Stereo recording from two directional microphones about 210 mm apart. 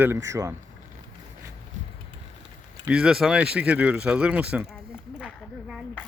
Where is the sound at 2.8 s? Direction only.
5° right (ahead or behind).